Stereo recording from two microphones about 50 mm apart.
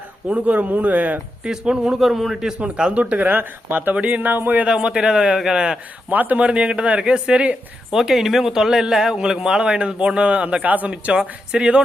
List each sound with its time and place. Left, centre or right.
0.3 s speech: right
1.5 s a man's voice: centre
2.0 s a man's voice: centre
2.6 s a man's voice: right
3.2 s speech: right
3.9 s speech: right
4.6 s a man's voice: right
6.1 s speech: right
6.4 s a man's voice: right
7.9 s a man's voice: centre